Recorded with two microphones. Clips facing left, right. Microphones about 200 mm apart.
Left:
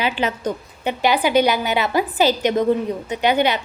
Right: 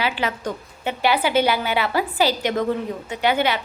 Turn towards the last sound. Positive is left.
turn(degrees=20)  # may be behind; listen again after turning